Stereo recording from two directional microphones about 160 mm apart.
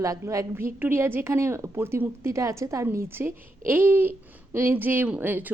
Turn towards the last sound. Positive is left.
turn(degrees=-10)  # may be behind; listen again after turning